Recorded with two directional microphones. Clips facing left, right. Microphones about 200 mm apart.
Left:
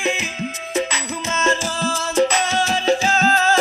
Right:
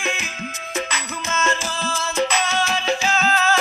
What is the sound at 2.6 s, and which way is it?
Music, 40° left (ahead or behind).